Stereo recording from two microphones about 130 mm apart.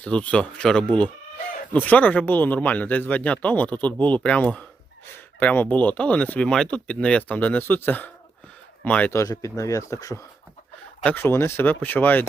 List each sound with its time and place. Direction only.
0.0 s speech: 10° left (ahead or behind)
9.1 s speech: 25° left (ahead or behind)